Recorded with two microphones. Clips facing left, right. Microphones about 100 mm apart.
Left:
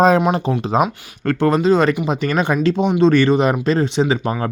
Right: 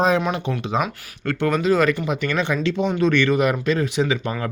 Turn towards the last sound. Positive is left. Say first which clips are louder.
# left 4 dB
turn(degrees=30)  # may be behind; listen again after turning